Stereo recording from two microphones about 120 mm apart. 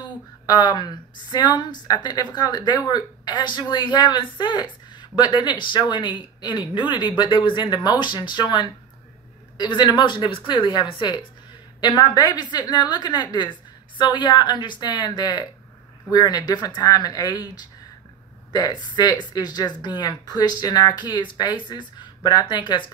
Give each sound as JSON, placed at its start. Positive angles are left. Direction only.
{"t": 0.5, "sound": "a woman's voice", "side_deg": 35}
{"t": 18.5, "sound": "a woman's voice", "side_deg": 35}